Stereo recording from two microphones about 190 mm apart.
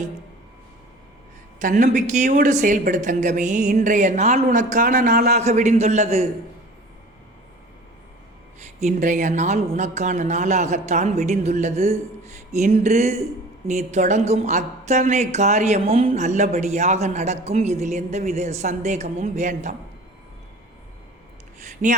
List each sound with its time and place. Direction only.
1.5 s a woman's voice: 40° right (ahead or behind)
5.4 s a woman's voice: 35° right (ahead or behind)
8.8 s a woman's voice: 40° right (ahead or behind)
21.8 s a woman's voice: 40° right (ahead or behind)